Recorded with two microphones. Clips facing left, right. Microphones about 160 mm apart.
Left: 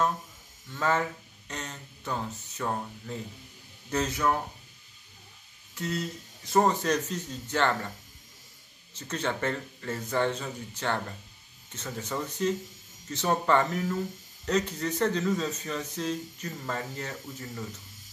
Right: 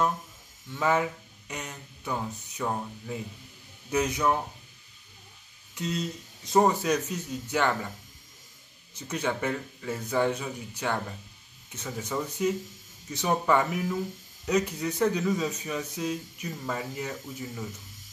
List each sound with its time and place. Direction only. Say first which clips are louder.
0.7 s speech: right 2 dB; 15° right (ahead or behind)
5.8 s speech: right 1 dB; 20° right (ahead or behind)
8.9 s speech: right 1 dB; 10° right (ahead or behind)